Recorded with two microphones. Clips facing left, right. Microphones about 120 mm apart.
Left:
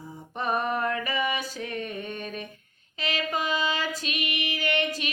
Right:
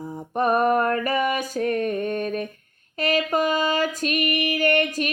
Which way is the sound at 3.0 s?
50° right (ahead or behind).